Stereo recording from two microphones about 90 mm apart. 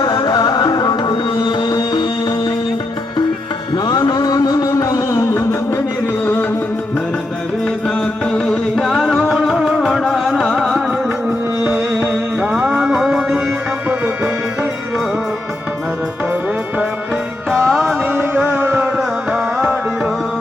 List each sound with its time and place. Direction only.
0.0 s music: 50° left (ahead or behind)
3.8 s music: 50° left (ahead or behind); by 5.8 s 30° left (ahead or behind)
7.9 s music: 5° left (ahead or behind)
11.6 s music: 25° right (ahead or behind); by 13.4 s 5° right (ahead or behind)
17.5 s music: centre (ahead or behind)
17.8 s music: 20° right (ahead or behind)
18.9 s music: centre (ahead or behind)